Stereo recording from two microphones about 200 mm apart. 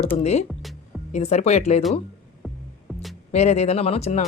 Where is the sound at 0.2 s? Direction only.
30° left (ahead or behind).